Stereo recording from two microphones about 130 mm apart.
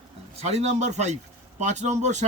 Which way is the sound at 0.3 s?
55° right (ahead or behind).